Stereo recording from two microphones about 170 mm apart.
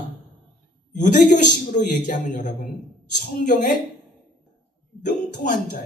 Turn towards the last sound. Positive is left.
turn(degrees=50)  # may be behind; listen again after turning